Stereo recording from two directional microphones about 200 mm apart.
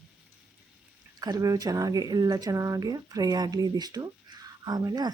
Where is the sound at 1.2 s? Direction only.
20° right (ahead or behind).